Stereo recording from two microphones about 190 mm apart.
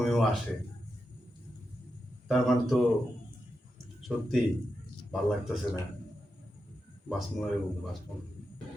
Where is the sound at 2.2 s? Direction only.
Centre (ahead or behind).